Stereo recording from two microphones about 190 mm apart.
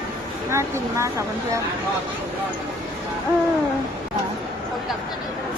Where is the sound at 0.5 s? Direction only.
15° right (ahead or behind).